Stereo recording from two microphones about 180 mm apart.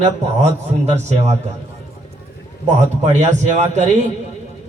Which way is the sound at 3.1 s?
40° right (ahead or behind).